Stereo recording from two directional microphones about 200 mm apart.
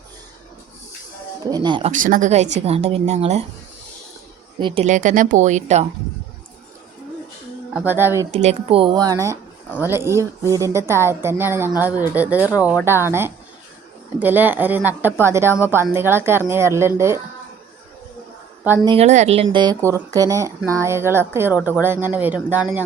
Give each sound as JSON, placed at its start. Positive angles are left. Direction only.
{"t": 1.5, "sound": "speech", "side_deg": -20}
{"t": 1.9, "sound": "a woman's voice", "side_deg": -40}
{"t": 4.6, "sound": "a woman's voice", "side_deg": -30}
{"t": 7.7, "sound": "a woman's voice", "side_deg": -5}
{"t": 8.3, "sound": "a woman's voice", "side_deg": -30}
{"t": 18.9, "sound": "a woman's voice", "side_deg": -35}